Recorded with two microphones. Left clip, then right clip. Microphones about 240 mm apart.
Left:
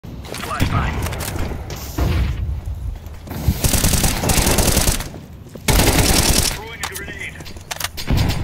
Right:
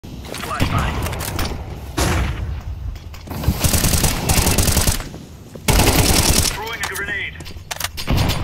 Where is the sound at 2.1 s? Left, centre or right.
Right.